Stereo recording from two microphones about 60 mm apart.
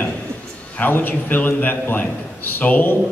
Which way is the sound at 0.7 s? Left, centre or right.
Left.